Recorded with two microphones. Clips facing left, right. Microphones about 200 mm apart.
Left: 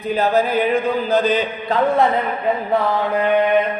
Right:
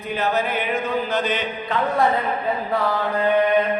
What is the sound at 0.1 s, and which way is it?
Mantra, 35° left (ahead or behind).